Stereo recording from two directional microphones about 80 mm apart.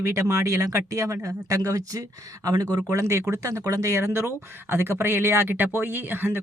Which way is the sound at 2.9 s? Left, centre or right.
Right.